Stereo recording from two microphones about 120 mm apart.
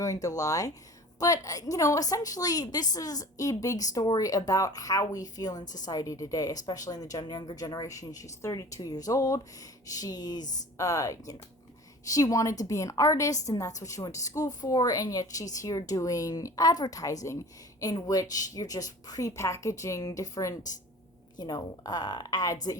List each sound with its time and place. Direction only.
0.0 s a woman's voice: 30° left (ahead or behind)